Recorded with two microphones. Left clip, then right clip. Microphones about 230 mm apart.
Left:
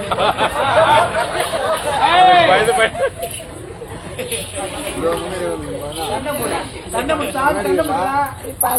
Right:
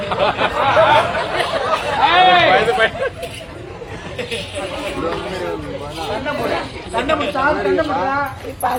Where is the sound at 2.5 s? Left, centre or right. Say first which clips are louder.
Even; left.